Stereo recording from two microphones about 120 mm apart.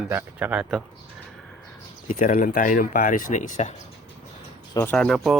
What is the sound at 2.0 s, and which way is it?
Speech, 90° left.